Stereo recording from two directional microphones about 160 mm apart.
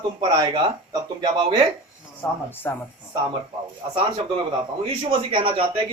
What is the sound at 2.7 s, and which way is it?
Speech, 15° left (ahead or behind).